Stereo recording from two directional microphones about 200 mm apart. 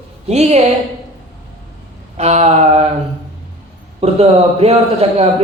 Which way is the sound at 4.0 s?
30° right (ahead or behind).